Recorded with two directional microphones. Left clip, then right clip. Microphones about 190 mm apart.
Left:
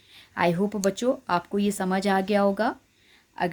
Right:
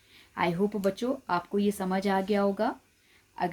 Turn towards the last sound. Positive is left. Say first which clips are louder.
# left 3 dB
turn(degrees=30)  # may be behind; listen again after turning